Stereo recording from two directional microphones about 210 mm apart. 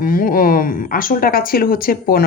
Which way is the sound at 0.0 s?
45° left (ahead or behind).